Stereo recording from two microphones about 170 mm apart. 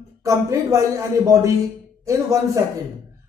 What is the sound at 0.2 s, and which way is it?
A man's voice, 20° right (ahead or behind).